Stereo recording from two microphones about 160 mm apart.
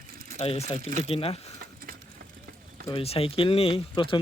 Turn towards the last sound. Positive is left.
turn(degrees=30)  # may be behind; listen again after turning